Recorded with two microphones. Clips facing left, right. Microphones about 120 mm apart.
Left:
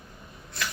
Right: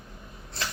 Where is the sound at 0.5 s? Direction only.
30° right (ahead or behind).